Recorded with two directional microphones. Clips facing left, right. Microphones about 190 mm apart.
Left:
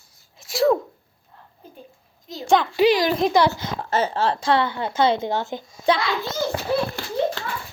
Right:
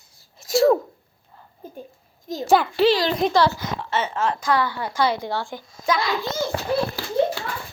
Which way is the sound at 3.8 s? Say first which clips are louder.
Left 2 dB; 40° left (ahead or behind).